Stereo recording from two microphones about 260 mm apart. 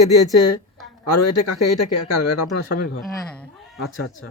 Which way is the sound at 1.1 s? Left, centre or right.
Left.